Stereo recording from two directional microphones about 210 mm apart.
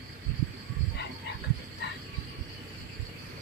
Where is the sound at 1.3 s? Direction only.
55° left (ahead or behind).